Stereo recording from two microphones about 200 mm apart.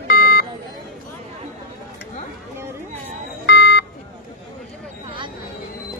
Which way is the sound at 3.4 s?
60° left (ahead or behind).